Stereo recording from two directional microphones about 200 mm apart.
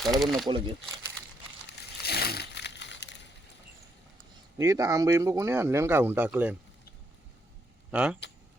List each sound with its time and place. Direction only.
0.0 s speech: centre (ahead or behind)
0.4 s speech: 25° right (ahead or behind)
1.7 s a sound: 55° left (ahead or behind)
4.5 s speech: 15° right (ahead or behind)
7.9 s speech: 5° right (ahead or behind)